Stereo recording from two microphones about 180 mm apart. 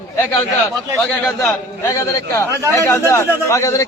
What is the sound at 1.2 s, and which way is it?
A man's voice, 10° left (ahead or behind).